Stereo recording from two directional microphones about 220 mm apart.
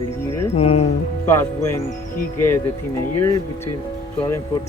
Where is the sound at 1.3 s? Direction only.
10° left (ahead or behind).